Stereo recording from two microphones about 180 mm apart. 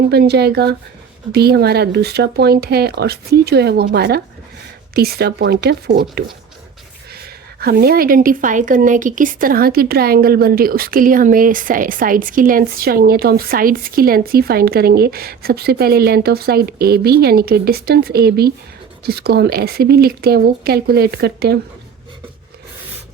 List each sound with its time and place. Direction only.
0.1 s a woman's voice: 65° right (ahead or behind)
7.6 s a woman's voice: 60° right (ahead or behind)